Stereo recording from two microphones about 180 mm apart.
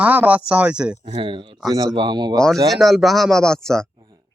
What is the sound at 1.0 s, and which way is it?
Speech, 30° right (ahead or behind).